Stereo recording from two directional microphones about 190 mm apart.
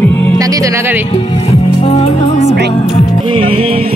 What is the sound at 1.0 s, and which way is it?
Music, 30° left (ahead or behind).